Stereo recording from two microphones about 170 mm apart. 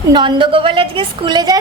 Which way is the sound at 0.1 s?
25° right (ahead or behind).